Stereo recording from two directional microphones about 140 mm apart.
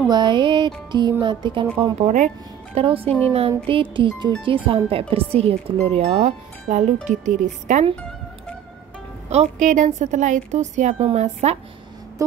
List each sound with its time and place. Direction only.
0.1 s music: 35° right (ahead or behind)
2.0 s speech: 55° right (ahead or behind)
2.8 s music: 40° right (ahead or behind)
4.4 s speech: 40° right (ahead or behind); by 7.8 s 60° right (ahead or behind)
9.3 s speech: 55° right (ahead or behind)
12.2 s music: 20° right (ahead or behind)